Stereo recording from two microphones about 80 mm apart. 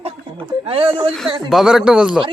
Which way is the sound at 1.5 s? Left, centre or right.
Centre.